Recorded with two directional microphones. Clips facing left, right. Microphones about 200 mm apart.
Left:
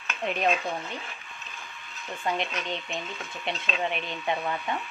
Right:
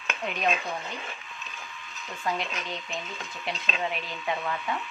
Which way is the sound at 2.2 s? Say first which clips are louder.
Left 2 dB; 25° left (ahead or behind).